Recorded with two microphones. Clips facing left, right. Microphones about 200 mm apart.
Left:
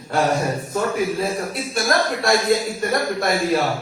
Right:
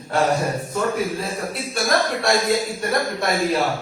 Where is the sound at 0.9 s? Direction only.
Centre (ahead or behind).